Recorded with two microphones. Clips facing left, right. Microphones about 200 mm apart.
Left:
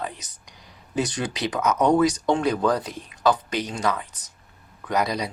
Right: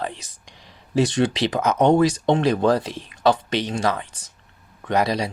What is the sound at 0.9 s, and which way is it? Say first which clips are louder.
Speech: right 7 dB; 25° right (ahead or behind).